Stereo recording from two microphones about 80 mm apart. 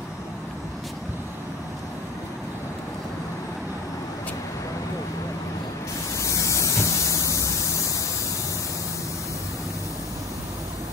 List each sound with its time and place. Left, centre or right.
6.1 s spray: left